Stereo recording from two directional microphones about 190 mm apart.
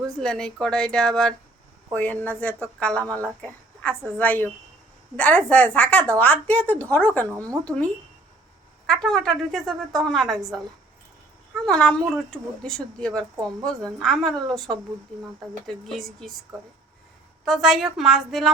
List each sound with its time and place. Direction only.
0.2 s a woman's voice: 5° left (ahead or behind)
7.3 s speech: 15° right (ahead or behind)
8.9 s speech: 5° left (ahead or behind)
11.6 s speech: 5° left (ahead or behind)
17.4 s speech: centre (ahead or behind)